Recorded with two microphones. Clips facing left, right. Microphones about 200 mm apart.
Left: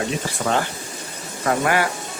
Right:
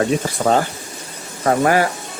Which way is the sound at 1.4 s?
40° right (ahead or behind).